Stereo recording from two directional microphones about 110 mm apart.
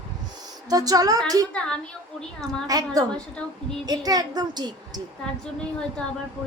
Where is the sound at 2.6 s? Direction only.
35° right (ahead or behind).